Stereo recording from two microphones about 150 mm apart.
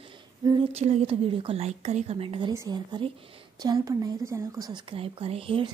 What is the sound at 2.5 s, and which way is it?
A woman's voice, 25° right (ahead or behind).